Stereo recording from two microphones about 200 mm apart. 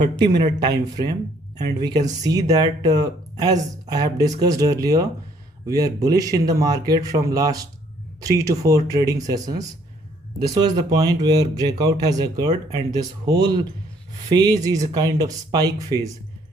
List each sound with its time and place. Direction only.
0.6 s speech: 20° right (ahead or behind)